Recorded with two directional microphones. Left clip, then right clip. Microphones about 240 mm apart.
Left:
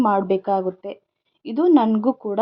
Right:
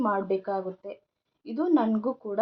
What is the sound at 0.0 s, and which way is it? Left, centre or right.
A woman's voice, left.